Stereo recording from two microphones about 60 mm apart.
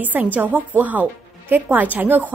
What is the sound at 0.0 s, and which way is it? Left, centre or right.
A woman's voice, right.